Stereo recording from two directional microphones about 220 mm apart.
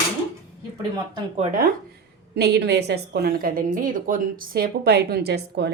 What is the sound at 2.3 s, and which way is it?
A woman's voice, 50° right (ahead or behind).